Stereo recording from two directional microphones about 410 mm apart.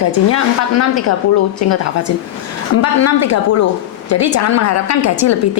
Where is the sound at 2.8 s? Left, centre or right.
Left.